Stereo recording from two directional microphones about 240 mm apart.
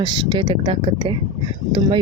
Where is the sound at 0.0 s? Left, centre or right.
Centre.